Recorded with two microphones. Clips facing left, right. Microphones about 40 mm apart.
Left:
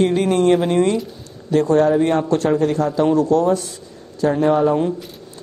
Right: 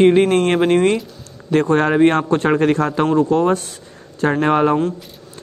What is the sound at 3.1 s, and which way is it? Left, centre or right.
Speech, right.